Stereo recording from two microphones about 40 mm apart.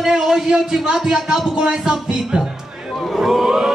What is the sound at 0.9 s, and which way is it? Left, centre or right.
Music, centre.